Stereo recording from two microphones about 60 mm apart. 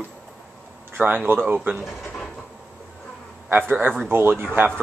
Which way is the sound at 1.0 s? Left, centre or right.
Right.